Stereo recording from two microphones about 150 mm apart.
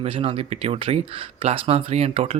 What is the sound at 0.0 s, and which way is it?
Speech, 40° right (ahead or behind).